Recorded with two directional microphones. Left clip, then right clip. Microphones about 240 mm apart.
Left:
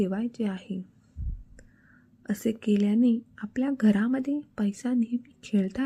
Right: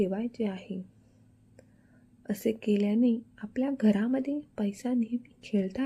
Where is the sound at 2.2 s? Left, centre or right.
Centre.